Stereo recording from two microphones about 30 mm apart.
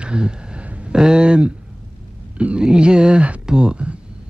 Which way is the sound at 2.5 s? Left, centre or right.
Right.